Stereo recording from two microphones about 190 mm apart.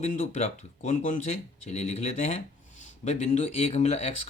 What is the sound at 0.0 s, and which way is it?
Speech, 35° left (ahead or behind).